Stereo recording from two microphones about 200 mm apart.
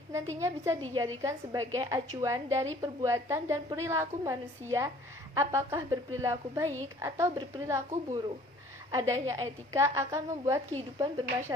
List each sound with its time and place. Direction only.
0.1 s a woman's voice: 15° right (ahead or behind)